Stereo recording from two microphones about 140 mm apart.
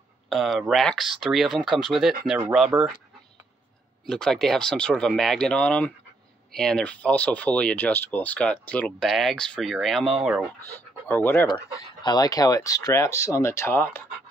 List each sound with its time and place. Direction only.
0.3 s speech: centre (ahead or behind)
4.0 s speech: 5° left (ahead or behind)
11.1 s speech: 15° left (ahead or behind)
12.0 s speech: 30° left (ahead or behind)